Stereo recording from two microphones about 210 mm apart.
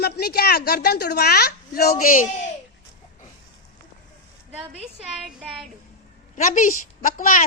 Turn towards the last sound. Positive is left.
turn(degrees=40)  # may be behind; listen again after turning